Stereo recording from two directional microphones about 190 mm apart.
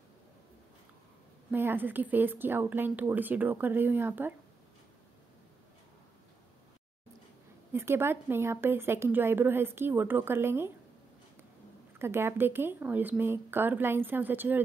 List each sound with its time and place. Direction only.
1.5 s a woman's voice: 10° right (ahead or behind)
7.7 s a woman's voice: 15° right (ahead or behind)
12.0 s a woman's voice: 10° right (ahead or behind)